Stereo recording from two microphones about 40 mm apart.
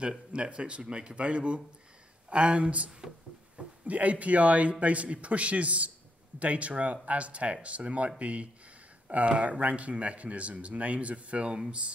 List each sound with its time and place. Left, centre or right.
0.3 s speech: right